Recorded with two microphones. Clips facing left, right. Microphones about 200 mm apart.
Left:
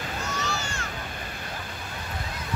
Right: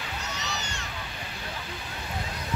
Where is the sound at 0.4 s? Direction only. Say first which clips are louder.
Left 4 dB; 20° right (ahead or behind).